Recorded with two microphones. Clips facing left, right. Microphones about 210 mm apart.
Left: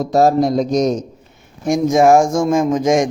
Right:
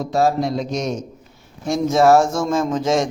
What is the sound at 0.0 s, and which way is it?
Speech, 40° left (ahead or behind).